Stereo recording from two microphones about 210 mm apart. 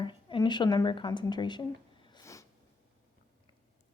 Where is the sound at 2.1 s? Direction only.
15° left (ahead or behind).